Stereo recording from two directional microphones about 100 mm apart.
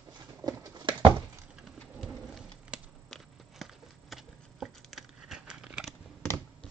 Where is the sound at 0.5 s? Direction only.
45° right (ahead or behind).